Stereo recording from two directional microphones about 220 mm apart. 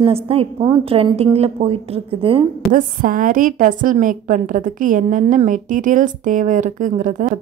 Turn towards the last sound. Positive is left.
turn(degrees=-35)  # may be behind; listen again after turning